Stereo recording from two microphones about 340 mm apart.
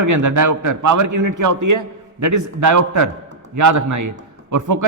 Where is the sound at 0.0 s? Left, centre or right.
Right.